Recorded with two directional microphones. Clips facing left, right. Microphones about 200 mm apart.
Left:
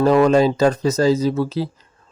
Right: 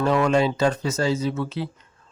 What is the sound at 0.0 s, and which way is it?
Speech, 35° left (ahead or behind).